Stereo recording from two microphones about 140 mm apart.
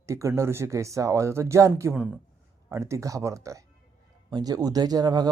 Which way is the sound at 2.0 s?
10° right (ahead or behind).